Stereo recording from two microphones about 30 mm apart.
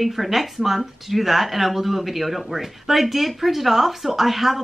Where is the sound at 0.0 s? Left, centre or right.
Centre.